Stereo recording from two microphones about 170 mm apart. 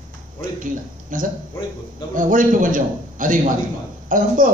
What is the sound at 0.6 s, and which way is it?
A man's voice, 50° right (ahead or behind).